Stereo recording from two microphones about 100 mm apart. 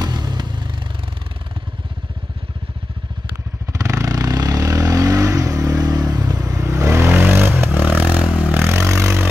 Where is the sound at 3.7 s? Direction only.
35° right (ahead or behind).